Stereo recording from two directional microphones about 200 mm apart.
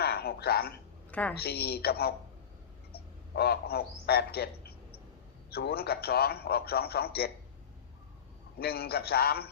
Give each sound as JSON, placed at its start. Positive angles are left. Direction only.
{"t": 0.0, "sound": "a sound", "side_deg": 50}
{"t": 1.1, "sound": "a woman's voice", "side_deg": 5}
{"t": 1.4, "sound": "a man's voice", "side_deg": 50}
{"t": 8.5, "sound": "a man's voice", "side_deg": 50}